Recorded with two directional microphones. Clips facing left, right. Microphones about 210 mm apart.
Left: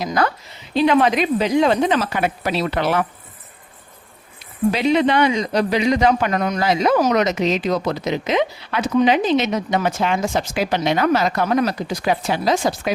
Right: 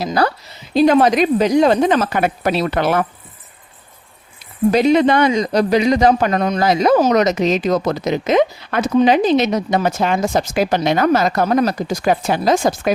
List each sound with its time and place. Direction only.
0.0 s speech: 35° right (ahead or behind)
4.7 s a man's voice: 45° right (ahead or behind)